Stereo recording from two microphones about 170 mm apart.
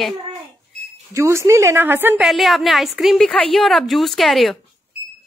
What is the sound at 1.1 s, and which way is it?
A woman's voice, 15° right (ahead or behind).